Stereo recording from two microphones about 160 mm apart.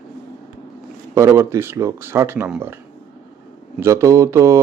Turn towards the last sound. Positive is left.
turn(degrees=-20)  # may be behind; listen again after turning